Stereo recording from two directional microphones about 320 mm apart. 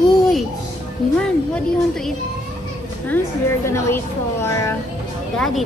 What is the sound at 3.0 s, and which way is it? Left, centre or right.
A woman's voice, centre.